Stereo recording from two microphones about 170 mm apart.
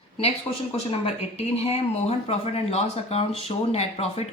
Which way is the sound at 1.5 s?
35° left (ahead or behind).